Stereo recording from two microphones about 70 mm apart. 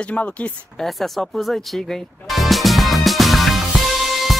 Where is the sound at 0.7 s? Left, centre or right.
Centre.